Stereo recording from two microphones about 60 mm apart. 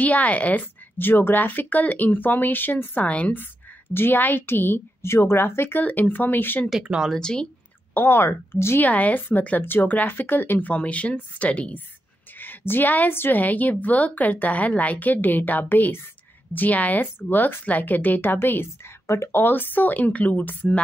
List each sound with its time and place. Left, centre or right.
0.0 s a woman's voice: left
3.9 s a woman's voice: left
7.2 s speech: centre
7.9 s a woman's voice: left
8.8 s a woman's voice: left
10.7 s a woman's voice: left
12.4 s a woman's voice: left
19.0 s speech: left
19.3 s a woman's voice: left